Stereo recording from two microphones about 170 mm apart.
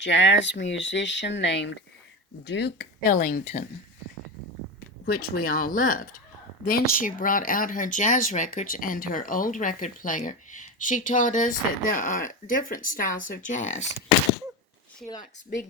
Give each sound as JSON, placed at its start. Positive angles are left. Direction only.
{"t": 0.0, "sound": "speech", "side_deg": 90}
{"t": 2.4, "sound": "speech", "side_deg": 80}
{"t": 5.0, "sound": "speech", "side_deg": 60}